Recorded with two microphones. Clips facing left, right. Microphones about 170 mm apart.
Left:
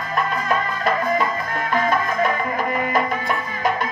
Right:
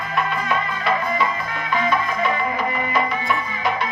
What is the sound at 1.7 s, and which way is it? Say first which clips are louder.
Music: left 1 dB; 45° left (ahead or behind).